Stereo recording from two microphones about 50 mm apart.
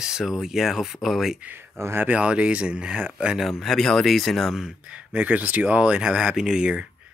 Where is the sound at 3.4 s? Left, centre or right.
Centre.